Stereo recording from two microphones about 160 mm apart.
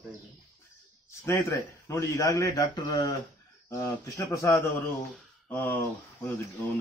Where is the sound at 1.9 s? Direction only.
20° left (ahead or behind).